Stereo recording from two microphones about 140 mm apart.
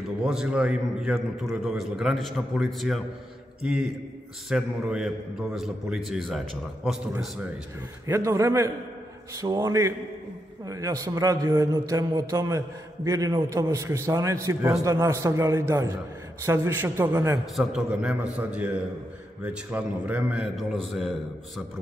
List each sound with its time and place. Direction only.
0.2 s a man's voice: 5° right (ahead or behind)
8.1 s a man's voice: 20° right (ahead or behind)
17.6 s a man's voice: 5° right (ahead or behind)